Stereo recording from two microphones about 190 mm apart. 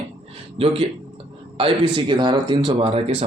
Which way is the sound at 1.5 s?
25° right (ahead or behind).